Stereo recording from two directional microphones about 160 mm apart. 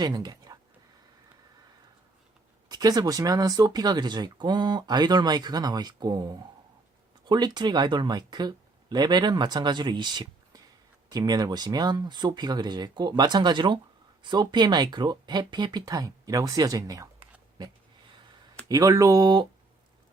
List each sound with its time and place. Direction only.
0.0 s a sound: 25° right (ahead or behind)
2.6 s speech: 25° right (ahead or behind)
18.7 s speech: 20° right (ahead or behind)